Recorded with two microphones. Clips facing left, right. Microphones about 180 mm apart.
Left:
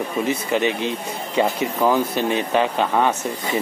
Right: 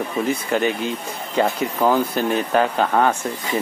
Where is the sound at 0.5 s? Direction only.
Centre (ahead or behind).